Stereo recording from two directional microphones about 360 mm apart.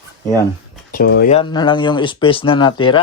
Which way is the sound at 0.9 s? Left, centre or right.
Left.